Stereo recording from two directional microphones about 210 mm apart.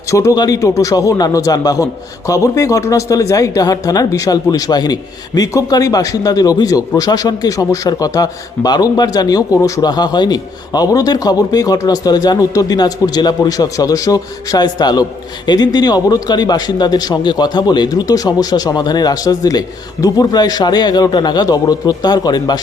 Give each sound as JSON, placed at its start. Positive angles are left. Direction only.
{"t": 0.1, "sound": "a man's voice", "side_deg": 15}